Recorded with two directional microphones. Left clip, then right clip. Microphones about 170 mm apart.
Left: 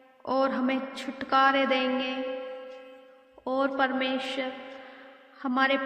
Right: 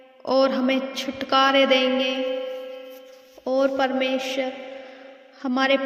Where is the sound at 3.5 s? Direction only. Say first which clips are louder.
Right 5 dB; 40° right (ahead or behind).